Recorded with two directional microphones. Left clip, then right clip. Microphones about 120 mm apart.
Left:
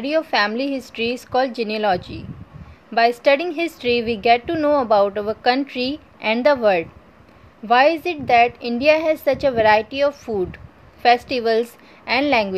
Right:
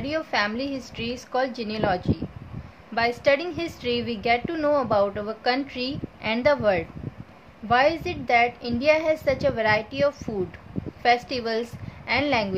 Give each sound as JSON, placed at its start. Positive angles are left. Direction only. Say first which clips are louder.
{"t": 0.0, "sound": "a woman's voice", "louder": "left 6 dB", "side_deg": 50}